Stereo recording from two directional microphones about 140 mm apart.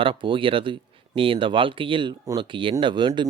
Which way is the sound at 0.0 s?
40° right (ahead or behind).